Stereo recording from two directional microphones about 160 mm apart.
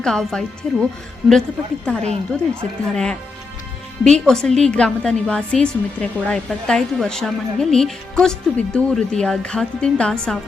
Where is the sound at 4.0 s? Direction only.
5° left (ahead or behind).